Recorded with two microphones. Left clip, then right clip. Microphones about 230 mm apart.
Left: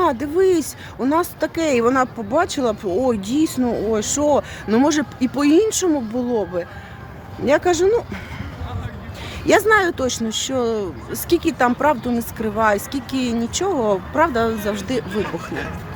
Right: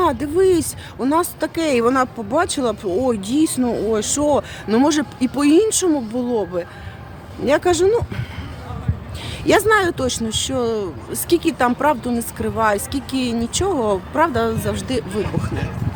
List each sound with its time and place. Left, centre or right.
0.0 s speech: centre
9.5 s speech: centre
15.1 s speech: centre